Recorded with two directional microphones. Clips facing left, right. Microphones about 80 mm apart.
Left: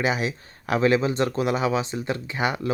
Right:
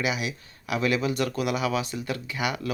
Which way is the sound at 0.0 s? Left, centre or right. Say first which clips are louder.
Left 4 dB; left.